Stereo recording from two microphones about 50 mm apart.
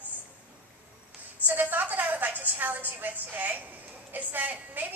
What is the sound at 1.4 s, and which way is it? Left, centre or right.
A woman's voice, right.